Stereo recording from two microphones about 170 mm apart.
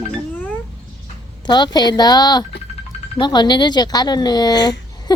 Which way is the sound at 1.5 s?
25° left (ahead or behind).